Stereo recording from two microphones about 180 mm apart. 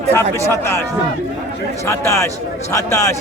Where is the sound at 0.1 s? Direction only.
15° left (ahead or behind).